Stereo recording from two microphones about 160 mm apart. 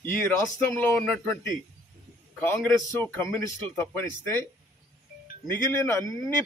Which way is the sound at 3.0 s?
15° left (ahead or behind).